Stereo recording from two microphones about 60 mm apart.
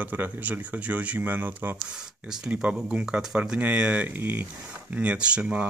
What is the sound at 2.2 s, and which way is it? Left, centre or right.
Speech, centre.